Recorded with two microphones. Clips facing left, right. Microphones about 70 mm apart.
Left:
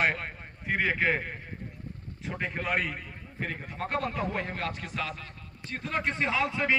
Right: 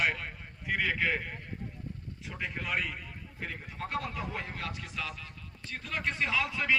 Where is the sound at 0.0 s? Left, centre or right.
Left.